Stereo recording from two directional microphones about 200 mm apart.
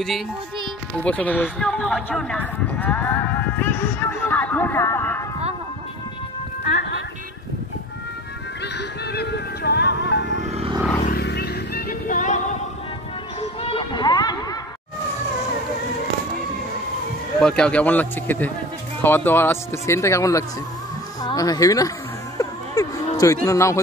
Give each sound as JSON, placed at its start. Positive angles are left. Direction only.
{"t": 1.0, "sound": "speech", "side_deg": 5}
{"t": 8.7, "sound": "music", "side_deg": 55}
{"t": 10.2, "sound": "vehicle", "side_deg": -35}
{"t": 11.1, "sound": "a sound", "side_deg": 55}
{"t": 13.4, "sound": "music", "side_deg": 30}
{"t": 17.4, "sound": "speech", "side_deg": 5}
{"t": 22.4, "sound": "a sound", "side_deg": 15}